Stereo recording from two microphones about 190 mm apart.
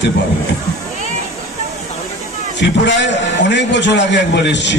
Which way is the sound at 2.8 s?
70° left (ahead or behind).